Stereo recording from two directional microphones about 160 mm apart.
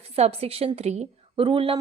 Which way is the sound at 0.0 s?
40° right (ahead or behind).